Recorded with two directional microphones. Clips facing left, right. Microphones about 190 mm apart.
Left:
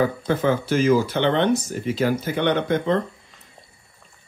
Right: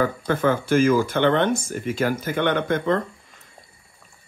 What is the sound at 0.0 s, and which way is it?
Speech, 50° right (ahead or behind).